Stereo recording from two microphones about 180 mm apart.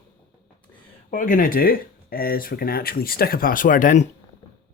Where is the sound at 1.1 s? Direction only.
45° left (ahead or behind).